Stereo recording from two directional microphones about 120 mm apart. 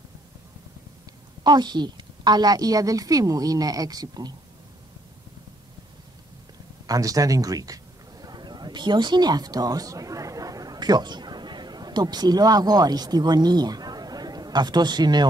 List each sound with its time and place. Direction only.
1.4 s a woman's voice: 35° right (ahead or behind)
6.9 s a man's voice: 30° right (ahead or behind)